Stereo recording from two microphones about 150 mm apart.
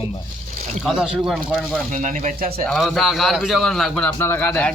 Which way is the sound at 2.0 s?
60° right (ahead or behind).